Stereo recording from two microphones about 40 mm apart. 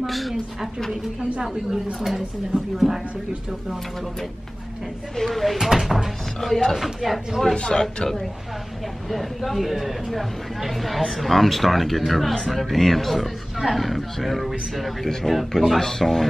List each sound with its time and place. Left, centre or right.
0.0 s a woman's voice: centre
5.1 s speech: centre
7.5 s a man's voice: left
9.1 s speech: centre